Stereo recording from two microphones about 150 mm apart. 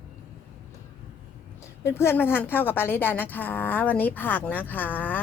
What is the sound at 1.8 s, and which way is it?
A woman's voice, 15° left (ahead or behind).